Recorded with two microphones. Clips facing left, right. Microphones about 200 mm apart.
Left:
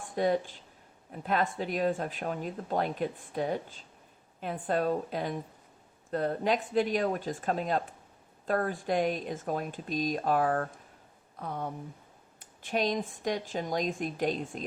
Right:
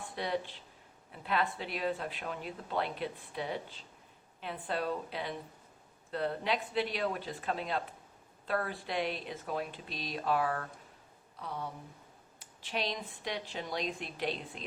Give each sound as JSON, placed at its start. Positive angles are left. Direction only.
{"t": 0.0, "sound": "speech", "side_deg": 45}